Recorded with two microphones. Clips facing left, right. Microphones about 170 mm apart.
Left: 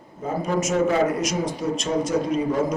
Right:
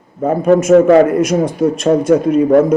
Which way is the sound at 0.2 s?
60° right (ahead or behind).